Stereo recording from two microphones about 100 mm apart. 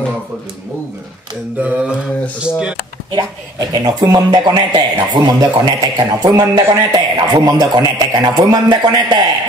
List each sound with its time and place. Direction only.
1.6 s mantra: 10° right (ahead or behind)
3.1 s speech: 45° right (ahead or behind)